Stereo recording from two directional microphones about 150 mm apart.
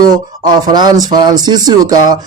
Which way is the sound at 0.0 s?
30° right (ahead or behind).